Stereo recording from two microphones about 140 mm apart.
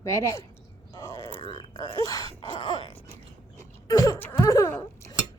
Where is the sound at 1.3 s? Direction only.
40° left (ahead or behind).